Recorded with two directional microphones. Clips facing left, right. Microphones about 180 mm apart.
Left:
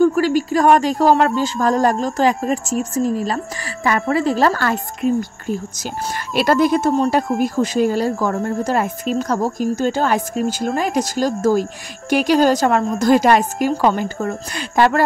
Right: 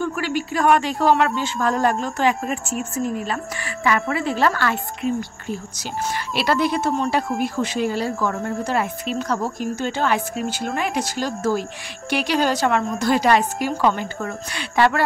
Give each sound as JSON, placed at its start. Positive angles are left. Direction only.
{"t": 0.0, "sound": "speech", "side_deg": 40}